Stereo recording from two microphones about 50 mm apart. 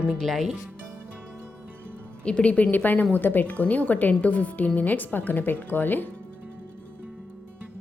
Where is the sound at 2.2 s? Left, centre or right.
Left.